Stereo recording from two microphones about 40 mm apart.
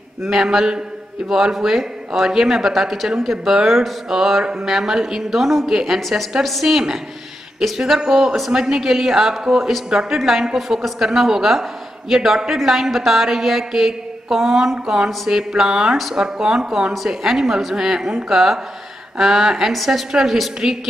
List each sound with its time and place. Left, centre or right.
0.2 s a woman's voice: centre
6.7 s a woman's voice: centre
9.8 s a woman's voice: centre